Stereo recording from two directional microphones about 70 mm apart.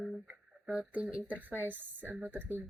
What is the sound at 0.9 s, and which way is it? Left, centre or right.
Speech, centre.